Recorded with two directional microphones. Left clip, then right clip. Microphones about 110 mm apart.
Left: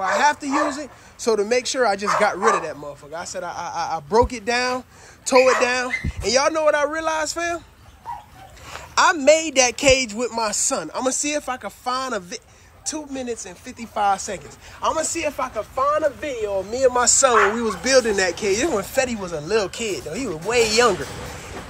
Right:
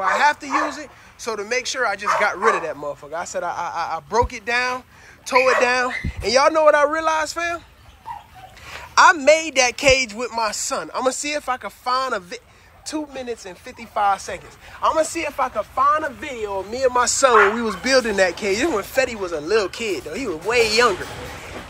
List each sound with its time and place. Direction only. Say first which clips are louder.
0.0 s speech: right 1 dB; 30° left (ahead or behind)
1.2 s speech: left 4 dB; 45° left (ahead or behind)
2.2 s speech: left 1 dB; 30° left (ahead or behind)
5.6 s speech: right 2 dB; 20° left (ahead or behind)
8.6 s speech: right 4 dB; 30° left (ahead or behind)